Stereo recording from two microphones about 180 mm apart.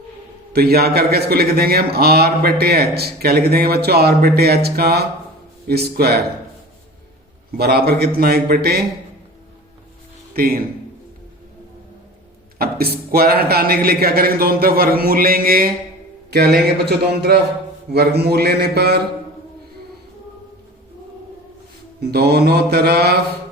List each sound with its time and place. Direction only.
0.5 s a man's voice: 60° right (ahead or behind)
7.5 s a man's voice: 60° right (ahead or behind)
10.3 s speech: 55° right (ahead or behind)
12.5 s a man's voice: 60° right (ahead or behind)
16.3 s a man's voice: 65° right (ahead or behind)
22.0 s a man's voice: 60° right (ahead or behind)